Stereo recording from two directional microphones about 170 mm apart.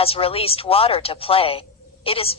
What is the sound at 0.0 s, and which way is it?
A woman's voice, 35° left (ahead or behind).